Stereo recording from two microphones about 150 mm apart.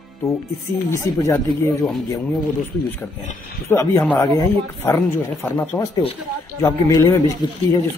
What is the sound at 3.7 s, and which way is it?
Speech, 15° left (ahead or behind).